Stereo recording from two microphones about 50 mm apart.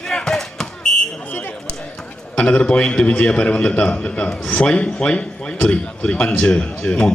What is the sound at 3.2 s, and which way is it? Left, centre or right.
Speech, left.